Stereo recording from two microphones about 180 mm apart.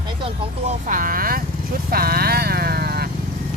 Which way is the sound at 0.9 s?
50° right (ahead or behind).